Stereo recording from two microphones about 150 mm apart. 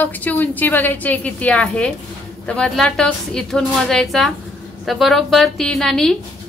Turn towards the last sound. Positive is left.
turn(degrees=5)  # may be behind; listen again after turning